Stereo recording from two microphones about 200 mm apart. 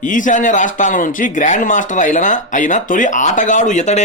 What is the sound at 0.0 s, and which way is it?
Speech, 40° left (ahead or behind).